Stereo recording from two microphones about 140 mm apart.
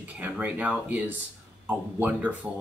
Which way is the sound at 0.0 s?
10° right (ahead or behind).